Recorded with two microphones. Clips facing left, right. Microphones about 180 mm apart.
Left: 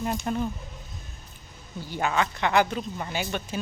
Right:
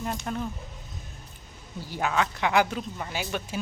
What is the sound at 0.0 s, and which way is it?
Speech, 5° left (ahead or behind).